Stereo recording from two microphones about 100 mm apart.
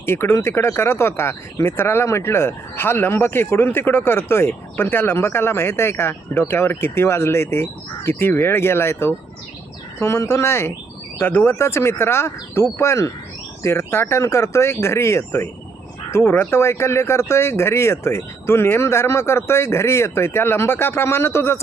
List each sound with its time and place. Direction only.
0.0 s speech: 25° left (ahead or behind)